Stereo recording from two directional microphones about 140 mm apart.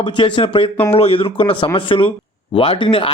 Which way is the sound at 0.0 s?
35° left (ahead or behind).